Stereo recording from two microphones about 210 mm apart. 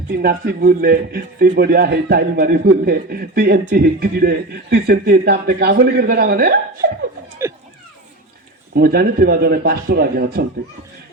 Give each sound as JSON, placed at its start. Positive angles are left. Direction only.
{"t": 0.1, "sound": "a man's voice", "side_deg": -45}
{"t": 7.4, "sound": "a sound", "side_deg": -10}
{"t": 8.7, "sound": "a man's voice", "side_deg": -45}